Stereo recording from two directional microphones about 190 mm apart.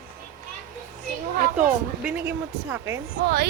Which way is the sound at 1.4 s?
45° right (ahead or behind).